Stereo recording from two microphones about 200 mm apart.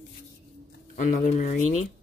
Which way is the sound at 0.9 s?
40° left (ahead or behind).